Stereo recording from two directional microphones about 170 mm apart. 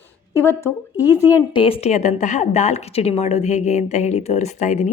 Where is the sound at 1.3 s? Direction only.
30° left (ahead or behind).